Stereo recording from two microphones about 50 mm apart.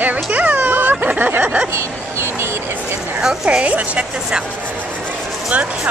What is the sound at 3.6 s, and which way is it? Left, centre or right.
Speech, right.